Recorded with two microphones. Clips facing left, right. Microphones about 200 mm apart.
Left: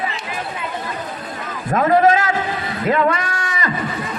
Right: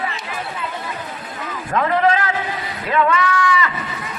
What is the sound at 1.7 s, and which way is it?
A man's voice, 40° left (ahead or behind).